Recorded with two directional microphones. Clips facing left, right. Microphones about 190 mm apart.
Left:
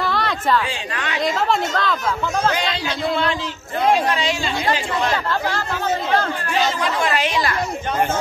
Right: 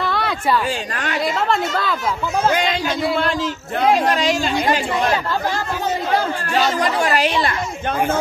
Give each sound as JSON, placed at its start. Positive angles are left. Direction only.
{"t": 0.0, "sound": "a sound", "side_deg": 0}
{"t": 0.9, "sound": "speech", "side_deg": -45}
{"t": 1.3, "sound": "speech", "side_deg": -5}
{"t": 2.5, "sound": "speech", "side_deg": -45}
{"t": 6.5, "sound": "speech", "side_deg": -40}